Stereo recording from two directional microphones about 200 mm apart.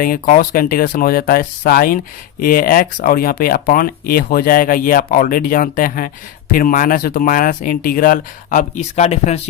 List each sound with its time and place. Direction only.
0.0 s speech: 45° left (ahead or behind)